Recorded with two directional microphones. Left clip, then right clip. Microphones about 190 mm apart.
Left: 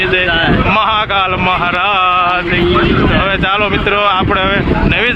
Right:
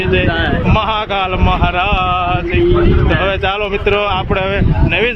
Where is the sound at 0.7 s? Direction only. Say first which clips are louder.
Left 3 dB; 5° left (ahead or behind).